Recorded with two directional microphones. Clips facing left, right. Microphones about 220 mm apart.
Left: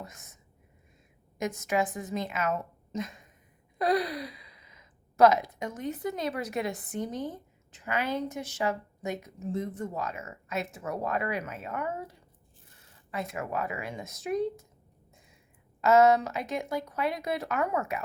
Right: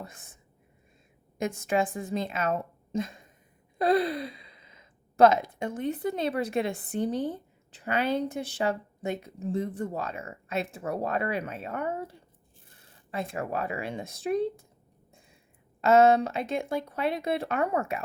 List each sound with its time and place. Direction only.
0.0 s speech: 30° right (ahead or behind)
1.4 s speech: 30° right (ahead or behind)
15.8 s speech: 30° right (ahead or behind)